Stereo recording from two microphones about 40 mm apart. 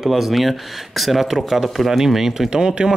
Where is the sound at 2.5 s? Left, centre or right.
Centre.